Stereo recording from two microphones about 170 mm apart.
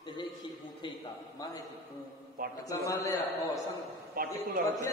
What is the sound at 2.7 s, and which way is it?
Speech, 20° left (ahead or behind).